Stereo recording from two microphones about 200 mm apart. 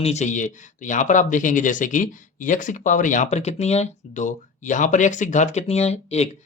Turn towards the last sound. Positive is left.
turn(degrees=30)  # may be behind; listen again after turning